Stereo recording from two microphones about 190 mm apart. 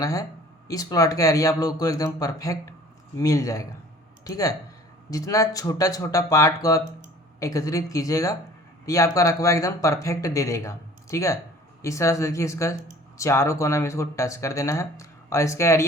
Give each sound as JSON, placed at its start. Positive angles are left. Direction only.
{"t": 0.0, "sound": "speech", "side_deg": 15}